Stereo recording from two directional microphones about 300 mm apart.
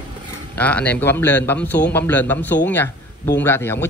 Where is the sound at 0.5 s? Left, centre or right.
Centre.